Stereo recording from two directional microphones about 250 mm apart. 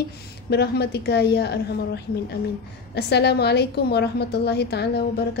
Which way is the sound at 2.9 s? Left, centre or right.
Left.